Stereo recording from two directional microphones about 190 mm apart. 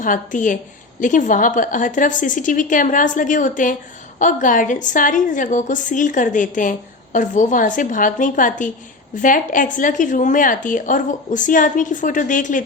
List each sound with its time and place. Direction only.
0.0 s a woman's voice: 45° left (ahead or behind)